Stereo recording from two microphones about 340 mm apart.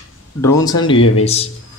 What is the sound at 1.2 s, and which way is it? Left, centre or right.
Speech, centre.